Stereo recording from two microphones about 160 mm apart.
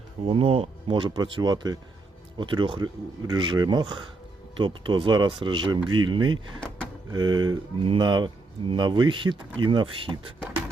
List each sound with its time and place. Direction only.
0.3 s speech: 35° right (ahead or behind)